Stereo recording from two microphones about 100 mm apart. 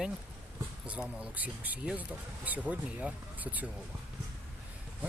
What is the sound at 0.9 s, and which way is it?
Speech, 10° right (ahead or behind).